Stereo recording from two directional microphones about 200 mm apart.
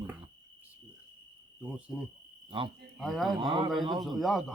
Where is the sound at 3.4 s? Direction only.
25° right (ahead or behind).